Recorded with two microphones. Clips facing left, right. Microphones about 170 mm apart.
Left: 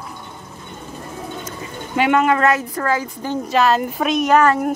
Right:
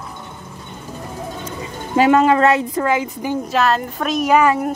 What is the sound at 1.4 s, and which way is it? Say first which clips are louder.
Speech: right 2 dB; 35° right (ahead or behind).